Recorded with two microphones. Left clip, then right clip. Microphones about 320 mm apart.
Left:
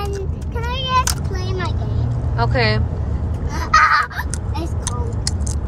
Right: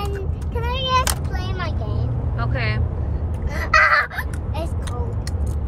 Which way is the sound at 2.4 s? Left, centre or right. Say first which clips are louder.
Left 8 dB; centre.